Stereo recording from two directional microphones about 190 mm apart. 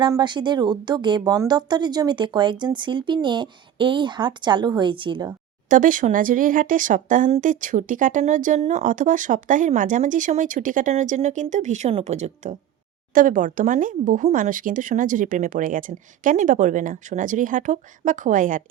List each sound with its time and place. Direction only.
0.0 s speech: 25° right (ahead or behind)
5.6 s speech: 45° right (ahead or behind)